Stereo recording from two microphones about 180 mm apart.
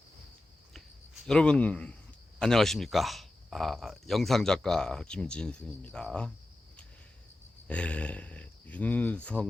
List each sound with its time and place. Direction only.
1.3 s speech: 5° left (ahead or behind)
7.7 s speech: 5° left (ahead or behind)